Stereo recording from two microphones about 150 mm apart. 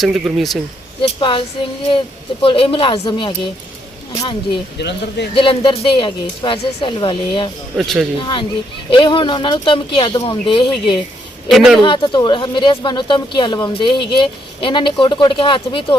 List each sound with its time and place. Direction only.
0.0 s speech: centre (ahead or behind)
1.2 s speech: 35° left (ahead or behind)
7.8 s speech: centre (ahead or behind)
8.2 s speech: 30° left (ahead or behind)
11.4 s speech: centre (ahead or behind)
11.8 s speech: 30° left (ahead or behind)